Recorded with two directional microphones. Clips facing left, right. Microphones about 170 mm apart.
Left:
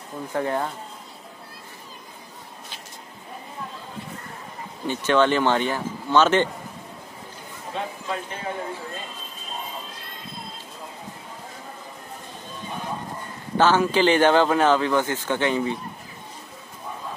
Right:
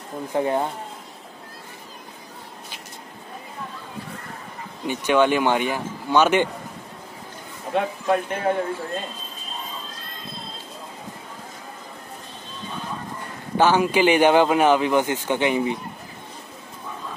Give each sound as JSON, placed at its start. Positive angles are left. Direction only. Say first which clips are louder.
{"t": 0.3, "sound": "speech", "louder": "right 3 dB", "side_deg": -20}
{"t": 4.8, "sound": "speech", "louder": "right 1 dB", "side_deg": -10}
{"t": 7.7, "sound": "speech", "louder": "right 8 dB", "side_deg": -60}
{"t": 13.6, "sound": "speech", "louder": "right 1 dB", "side_deg": -15}